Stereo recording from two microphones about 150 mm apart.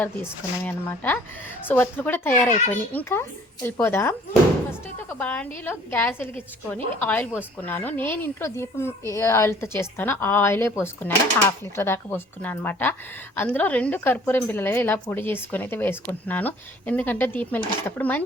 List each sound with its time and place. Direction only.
0.0 s a woman's voice: 10° left (ahead or behind)
5.2 s a woman's voice: 10° left (ahead or behind)